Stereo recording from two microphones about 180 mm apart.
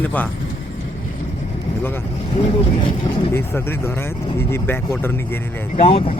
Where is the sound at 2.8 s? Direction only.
25° left (ahead or behind).